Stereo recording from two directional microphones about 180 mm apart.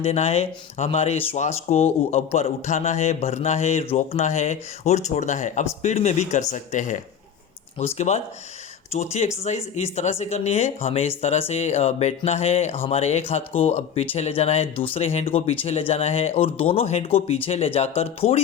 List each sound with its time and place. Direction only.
0.0 s speech: 35° left (ahead or behind)
7.9 s speech: 40° left (ahead or behind)